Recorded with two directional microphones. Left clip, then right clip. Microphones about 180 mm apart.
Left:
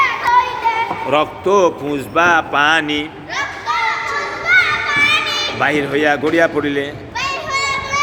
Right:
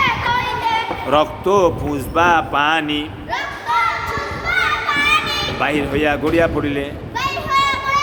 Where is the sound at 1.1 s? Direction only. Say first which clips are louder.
Even; 5° right (ahead or behind).